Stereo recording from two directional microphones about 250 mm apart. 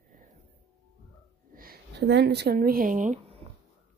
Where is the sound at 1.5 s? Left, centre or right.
Right.